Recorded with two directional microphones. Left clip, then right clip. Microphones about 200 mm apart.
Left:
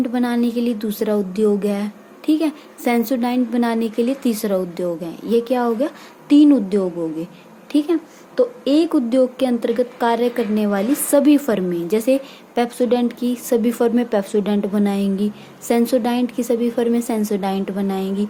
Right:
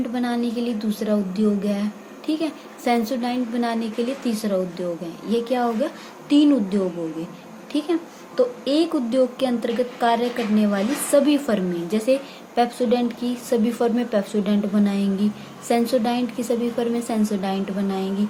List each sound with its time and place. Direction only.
0.1 s a woman's voice: 50° left (ahead or behind)